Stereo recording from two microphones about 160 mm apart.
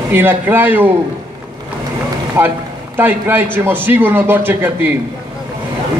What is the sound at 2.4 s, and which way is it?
A man's voice, 15° right (ahead or behind).